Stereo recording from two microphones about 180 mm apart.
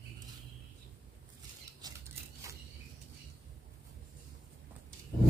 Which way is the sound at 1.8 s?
20° right (ahead or behind).